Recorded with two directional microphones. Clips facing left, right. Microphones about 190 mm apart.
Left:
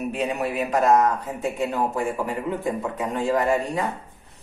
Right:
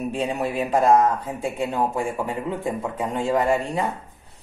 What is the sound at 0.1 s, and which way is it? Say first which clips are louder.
Speech: right 1 dB; 30° right (ahead or behind).